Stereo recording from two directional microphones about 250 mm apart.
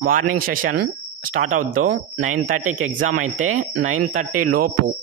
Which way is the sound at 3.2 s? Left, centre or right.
Right.